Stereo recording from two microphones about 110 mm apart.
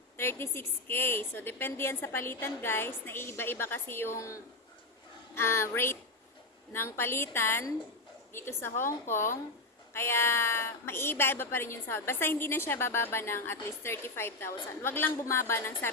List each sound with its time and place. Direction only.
0.2 s speech: 20° left (ahead or behind)